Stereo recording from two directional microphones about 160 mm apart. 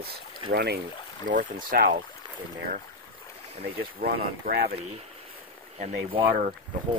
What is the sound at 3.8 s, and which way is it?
Speech, 70° right (ahead or behind).